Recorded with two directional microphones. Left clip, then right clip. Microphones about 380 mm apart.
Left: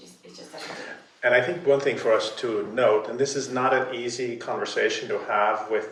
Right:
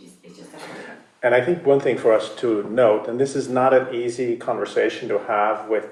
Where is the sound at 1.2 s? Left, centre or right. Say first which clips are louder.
Right 3 dB; centre.